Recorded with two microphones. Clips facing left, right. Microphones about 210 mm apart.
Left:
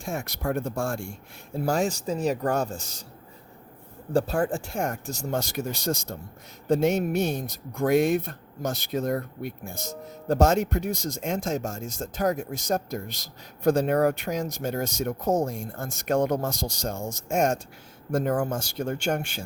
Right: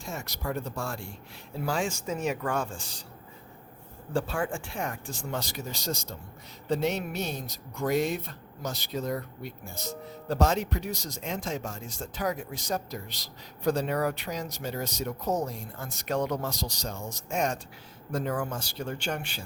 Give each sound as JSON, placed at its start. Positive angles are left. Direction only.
{"t": 0.0, "sound": "speech", "side_deg": 55}
{"t": 4.1, "sound": "speech", "side_deg": 40}